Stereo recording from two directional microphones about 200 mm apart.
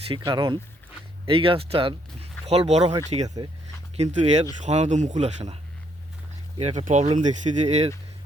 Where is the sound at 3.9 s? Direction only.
30° right (ahead or behind).